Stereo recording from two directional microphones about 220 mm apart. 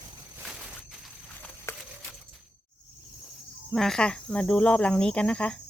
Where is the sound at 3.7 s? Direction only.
Centre (ahead or behind).